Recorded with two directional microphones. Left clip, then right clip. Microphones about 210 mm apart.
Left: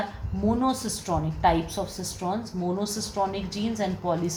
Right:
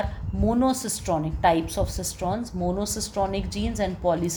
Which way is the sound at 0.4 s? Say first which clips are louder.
Right 2 dB; 55° right (ahead or behind).